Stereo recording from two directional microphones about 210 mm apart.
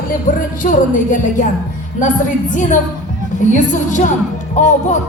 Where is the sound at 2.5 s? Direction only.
35° left (ahead or behind).